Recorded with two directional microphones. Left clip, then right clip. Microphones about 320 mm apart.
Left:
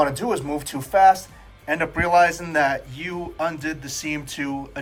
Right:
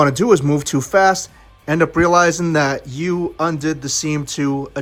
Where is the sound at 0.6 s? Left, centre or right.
Right.